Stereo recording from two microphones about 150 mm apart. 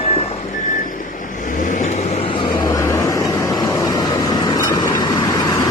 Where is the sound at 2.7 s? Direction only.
20° left (ahead or behind).